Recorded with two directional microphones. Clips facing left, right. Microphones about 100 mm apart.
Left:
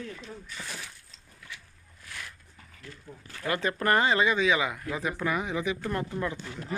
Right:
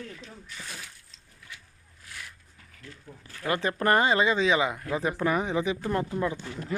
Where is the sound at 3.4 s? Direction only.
25° right (ahead or behind).